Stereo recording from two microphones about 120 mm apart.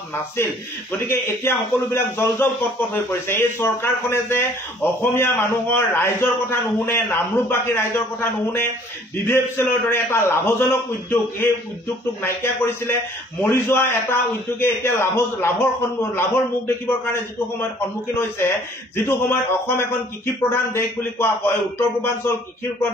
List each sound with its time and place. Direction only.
0.4 s a man's voice: 20° left (ahead or behind)